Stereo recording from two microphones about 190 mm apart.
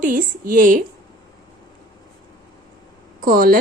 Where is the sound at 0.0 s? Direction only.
45° right (ahead or behind).